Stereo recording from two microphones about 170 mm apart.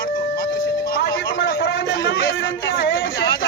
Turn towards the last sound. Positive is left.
turn(degrees=65)  # may be behind; listen again after turning